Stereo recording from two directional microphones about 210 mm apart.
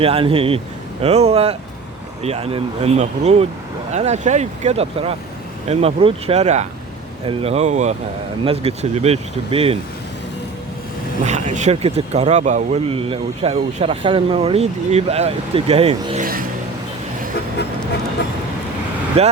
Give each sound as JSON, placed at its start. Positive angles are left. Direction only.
{"t": 0.0, "sound": "speech", "side_deg": -25}
{"t": 11.3, "sound": "speech", "side_deg": -35}
{"t": 19.2, "sound": "speech", "side_deg": -30}